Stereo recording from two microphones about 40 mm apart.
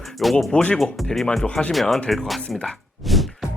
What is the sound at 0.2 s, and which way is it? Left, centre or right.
Speech, centre.